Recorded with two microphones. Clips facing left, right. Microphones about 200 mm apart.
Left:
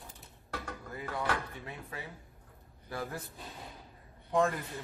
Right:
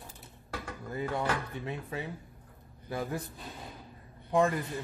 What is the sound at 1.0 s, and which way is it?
Speech, 25° right (ahead or behind).